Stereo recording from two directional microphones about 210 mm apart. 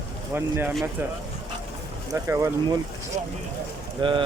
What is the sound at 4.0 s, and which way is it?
Speech, 25° right (ahead or behind).